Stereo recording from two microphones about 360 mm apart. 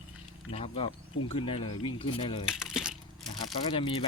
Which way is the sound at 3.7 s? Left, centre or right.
Centre.